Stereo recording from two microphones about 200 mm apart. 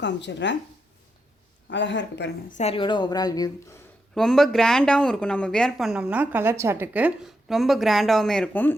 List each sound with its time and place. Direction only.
0.0 s speech: 60° left (ahead or behind)
1.7 s speech: 65° left (ahead or behind)
2.5 s a woman's voice: 35° left (ahead or behind)
4.1 s speech: centre (ahead or behind)